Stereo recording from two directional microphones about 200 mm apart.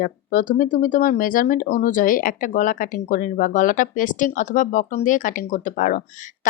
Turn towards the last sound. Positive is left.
turn(degrees=40)  # may be behind; listen again after turning